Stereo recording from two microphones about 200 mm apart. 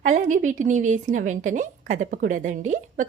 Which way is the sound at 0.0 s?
40° right (ahead or behind).